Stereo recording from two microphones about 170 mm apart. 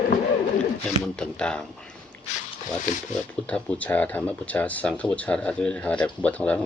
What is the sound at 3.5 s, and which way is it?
Speech, 10° left (ahead or behind).